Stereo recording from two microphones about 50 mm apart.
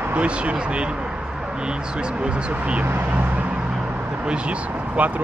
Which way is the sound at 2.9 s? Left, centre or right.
Right.